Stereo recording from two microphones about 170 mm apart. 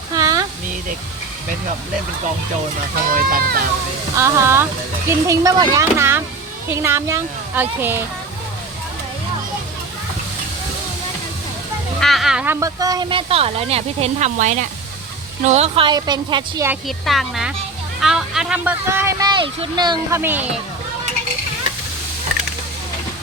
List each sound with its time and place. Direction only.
0.1 s a sound: 20° right (ahead or behind)
3.1 s speech: 55° right (ahead or behind)
4.2 s speech: 15° right (ahead or behind)
11.9 s a sound: centre (ahead or behind)
12.5 s a woman's voice: 20° right (ahead or behind)
16.8 s speech: centre (ahead or behind)
18.9 s speech: 15° right (ahead or behind)
19.3 s a woman's voice: 30° right (ahead or behind)
20.1 s speech: 10° right (ahead or behind)